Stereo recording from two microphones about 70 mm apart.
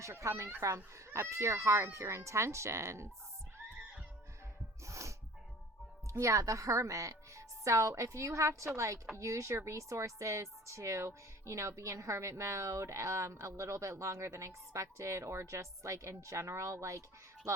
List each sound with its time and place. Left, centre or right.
0.0 s speech: right
4.9 s music: right
6.1 s speech: right